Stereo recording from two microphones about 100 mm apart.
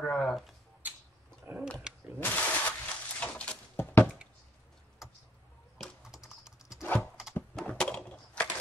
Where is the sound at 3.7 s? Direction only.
20° left (ahead or behind).